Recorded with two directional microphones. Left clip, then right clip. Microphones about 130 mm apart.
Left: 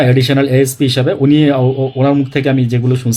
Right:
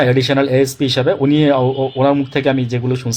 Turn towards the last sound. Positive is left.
turn(degrees=30)  # may be behind; listen again after turning